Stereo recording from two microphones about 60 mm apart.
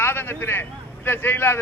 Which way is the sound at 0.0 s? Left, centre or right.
Left.